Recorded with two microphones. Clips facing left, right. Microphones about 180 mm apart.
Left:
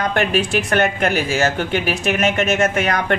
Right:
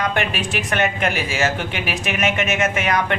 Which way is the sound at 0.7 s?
45° left (ahead or behind).